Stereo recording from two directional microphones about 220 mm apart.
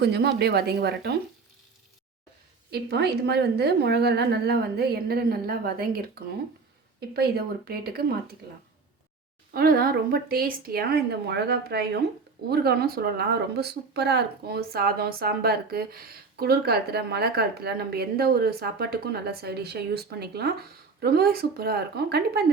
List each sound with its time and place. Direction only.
0.0 s speech: 50° right (ahead or behind)
2.6 s speech: 45° right (ahead or behind)
7.1 s speech: 45° right (ahead or behind)
9.5 s speech: 40° right (ahead or behind)